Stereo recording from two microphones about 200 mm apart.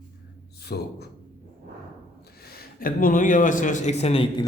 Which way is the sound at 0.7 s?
50° left (ahead or behind).